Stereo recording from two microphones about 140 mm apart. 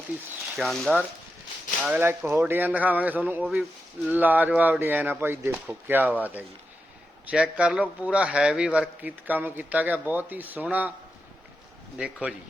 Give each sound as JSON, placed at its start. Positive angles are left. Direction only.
{"t": 0.5, "sound": "speech", "side_deg": 0}
{"t": 1.8, "sound": "a man's voice", "side_deg": -10}
{"t": 11.9, "sound": "a man's voice", "side_deg": -10}